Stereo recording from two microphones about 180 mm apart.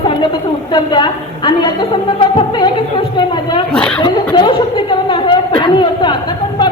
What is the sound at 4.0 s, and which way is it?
A woman's voice, 30° left (ahead or behind).